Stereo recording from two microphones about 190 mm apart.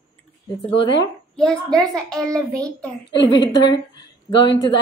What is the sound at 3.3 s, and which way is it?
A woman's voice, 25° left (ahead or behind).